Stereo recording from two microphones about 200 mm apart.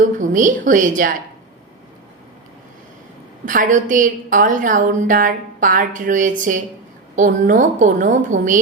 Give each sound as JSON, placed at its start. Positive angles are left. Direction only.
{"t": 0.2, "sound": "a woman's voice", "side_deg": -40}
{"t": 3.4, "sound": "a woman's voice", "side_deg": -40}